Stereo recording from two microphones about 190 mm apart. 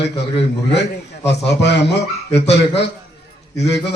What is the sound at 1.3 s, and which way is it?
A man's voice, 65° left (ahead or behind).